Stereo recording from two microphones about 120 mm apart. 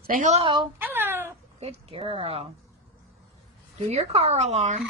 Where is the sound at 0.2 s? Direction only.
75° right (ahead or behind).